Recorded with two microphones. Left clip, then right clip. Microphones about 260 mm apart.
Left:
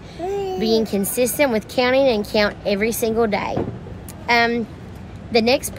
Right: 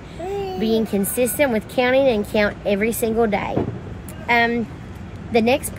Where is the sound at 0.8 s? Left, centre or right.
Centre.